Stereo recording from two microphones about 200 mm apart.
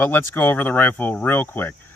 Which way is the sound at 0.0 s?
10° left (ahead or behind).